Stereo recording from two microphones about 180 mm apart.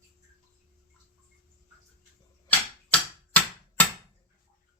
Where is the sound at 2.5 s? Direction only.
10° left (ahead or behind).